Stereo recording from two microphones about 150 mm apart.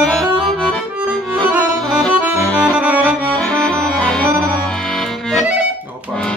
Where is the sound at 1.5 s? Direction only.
20° right (ahead or behind).